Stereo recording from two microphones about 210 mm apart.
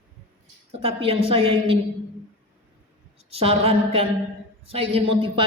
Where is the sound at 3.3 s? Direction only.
25° right (ahead or behind).